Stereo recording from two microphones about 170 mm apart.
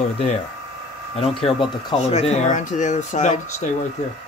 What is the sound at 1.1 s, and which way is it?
Speech, 35° left (ahead or behind).